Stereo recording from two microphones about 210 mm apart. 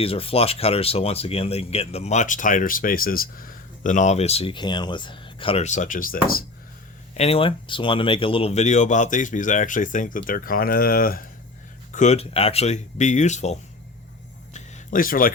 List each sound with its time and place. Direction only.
0.0 s speech: 25° left (ahead or behind)
7.1 s speech: 30° left (ahead or behind)
11.9 s speech: 30° left (ahead or behind)
14.5 s a sound: 40° left (ahead or behind)